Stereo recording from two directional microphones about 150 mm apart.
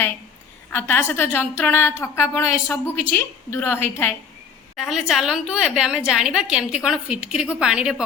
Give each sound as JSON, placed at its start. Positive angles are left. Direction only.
{"t": 0.7, "sound": "a woman's voice", "side_deg": 15}
{"t": 4.8, "sound": "a woman's voice", "side_deg": -5}